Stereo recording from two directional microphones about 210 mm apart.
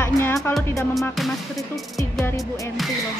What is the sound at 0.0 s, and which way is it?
Speech, 10° left (ahead or behind).